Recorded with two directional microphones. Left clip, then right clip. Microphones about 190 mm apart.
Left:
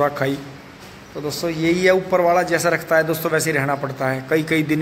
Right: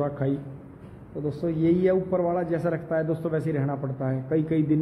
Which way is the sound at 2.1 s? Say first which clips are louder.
Left 9 dB; 10° left (ahead or behind).